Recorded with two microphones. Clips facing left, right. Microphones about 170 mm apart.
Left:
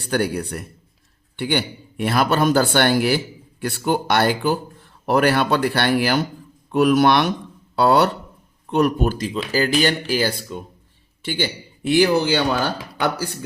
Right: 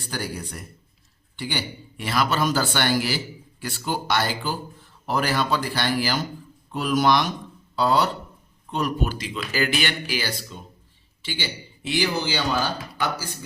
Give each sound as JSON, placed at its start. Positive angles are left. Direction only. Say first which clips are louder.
{"t": 0.0, "sound": "speech", "louder": "left 10 dB", "side_deg": 65}
{"t": 8.7, "sound": "speech", "louder": "left 7 dB", "side_deg": 55}